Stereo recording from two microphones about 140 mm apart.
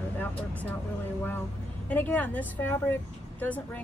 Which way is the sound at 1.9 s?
10° left (ahead or behind).